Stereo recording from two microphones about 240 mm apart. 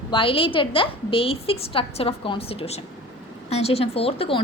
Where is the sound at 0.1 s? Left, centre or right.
Left.